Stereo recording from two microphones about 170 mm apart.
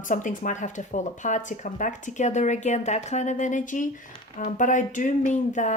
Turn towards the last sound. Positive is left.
turn(degrees=45)  # may be behind; listen again after turning